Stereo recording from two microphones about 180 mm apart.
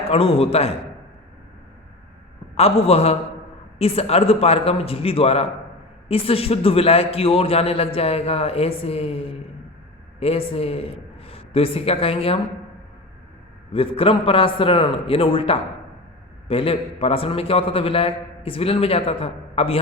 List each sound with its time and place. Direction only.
0.1 s a man's voice: 30° left (ahead or behind)
2.6 s a man's voice: 35° left (ahead or behind)
13.7 s a man's voice: 30° left (ahead or behind)